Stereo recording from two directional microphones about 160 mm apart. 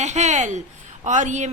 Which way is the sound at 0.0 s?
45° right (ahead or behind).